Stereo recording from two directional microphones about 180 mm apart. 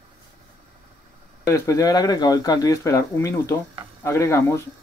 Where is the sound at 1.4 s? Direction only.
20° left (ahead or behind).